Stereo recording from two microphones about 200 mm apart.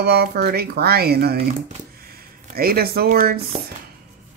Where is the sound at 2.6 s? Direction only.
50° right (ahead or behind).